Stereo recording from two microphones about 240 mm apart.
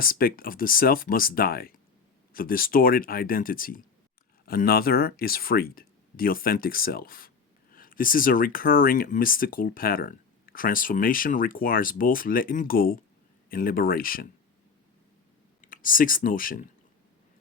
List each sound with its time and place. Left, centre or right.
0.0 s speech: left
15.6 s speech: left